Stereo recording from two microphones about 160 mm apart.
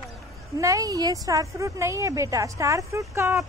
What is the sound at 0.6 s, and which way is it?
Speech, 20° right (ahead or behind).